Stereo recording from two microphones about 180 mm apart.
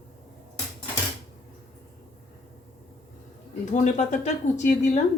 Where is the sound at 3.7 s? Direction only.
40° left (ahead or behind).